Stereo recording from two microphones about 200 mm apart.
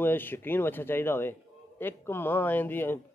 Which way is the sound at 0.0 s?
10° left (ahead or behind).